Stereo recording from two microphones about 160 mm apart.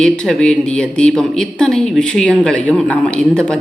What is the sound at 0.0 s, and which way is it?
Speech, 5° left (ahead or behind).